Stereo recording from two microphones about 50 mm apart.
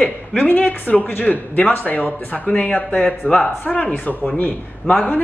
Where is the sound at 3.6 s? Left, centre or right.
Left.